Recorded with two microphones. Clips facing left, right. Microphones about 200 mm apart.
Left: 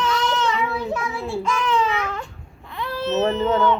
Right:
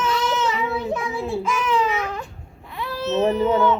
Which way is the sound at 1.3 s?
5° right (ahead or behind).